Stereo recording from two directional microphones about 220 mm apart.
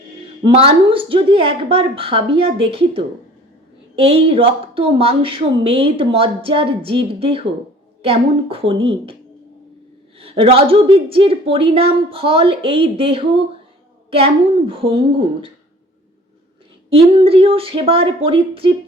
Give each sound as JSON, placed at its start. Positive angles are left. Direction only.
{"t": 0.4, "sound": "a woman's voice", "side_deg": -25}
{"t": 10.2, "sound": "a woman's voice", "side_deg": -25}
{"t": 14.7, "sound": "a woman's voice", "side_deg": -25}
{"t": 16.9, "sound": "a woman's voice", "side_deg": -25}